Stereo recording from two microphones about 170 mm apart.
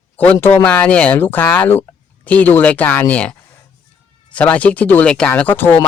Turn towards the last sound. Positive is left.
turn(degrees=10)  # may be behind; listen again after turning